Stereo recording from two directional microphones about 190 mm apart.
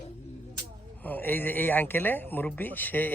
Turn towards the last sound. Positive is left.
turn(degrees=10)  # may be behind; listen again after turning